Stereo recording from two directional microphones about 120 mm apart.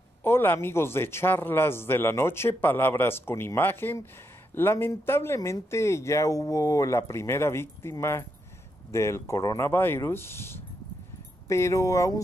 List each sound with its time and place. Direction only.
0.2 s a man's voice: 20° left (ahead or behind)